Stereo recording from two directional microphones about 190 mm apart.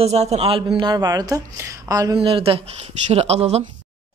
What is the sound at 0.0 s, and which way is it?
Speech, 35° right (ahead or behind).